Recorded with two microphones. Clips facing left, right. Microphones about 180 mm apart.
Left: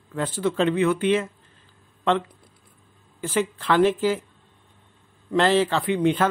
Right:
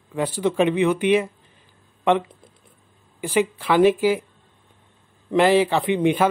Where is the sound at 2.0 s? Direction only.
20° right (ahead or behind).